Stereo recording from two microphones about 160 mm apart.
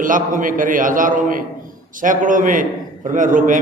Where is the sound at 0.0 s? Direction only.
55° right (ahead or behind).